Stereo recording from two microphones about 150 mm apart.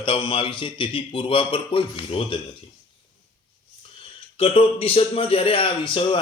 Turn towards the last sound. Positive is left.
turn(degrees=35)  # may be behind; listen again after turning